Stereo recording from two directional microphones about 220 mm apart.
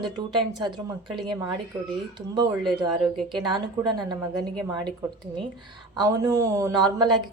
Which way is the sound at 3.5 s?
20° right (ahead or behind).